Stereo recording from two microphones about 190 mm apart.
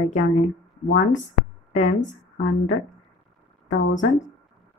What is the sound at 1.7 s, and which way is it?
Speech, 40° left (ahead or behind).